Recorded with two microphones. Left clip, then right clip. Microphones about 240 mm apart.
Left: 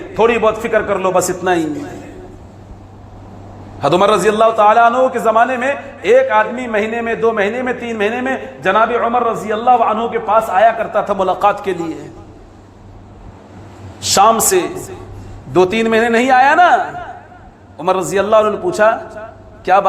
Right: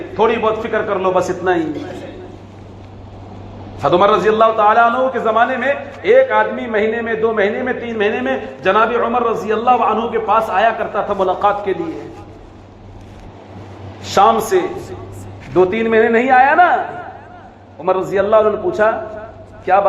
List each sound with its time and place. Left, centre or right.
0.1 s a man's voice: left
3.8 s a man's voice: left
14.0 s a man's voice: left